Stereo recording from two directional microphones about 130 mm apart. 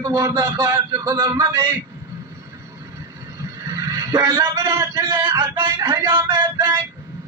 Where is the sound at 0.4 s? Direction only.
25° right (ahead or behind).